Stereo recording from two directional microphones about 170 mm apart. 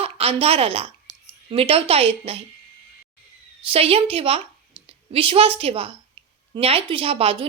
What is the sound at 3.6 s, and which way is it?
Speech, 35° right (ahead or behind).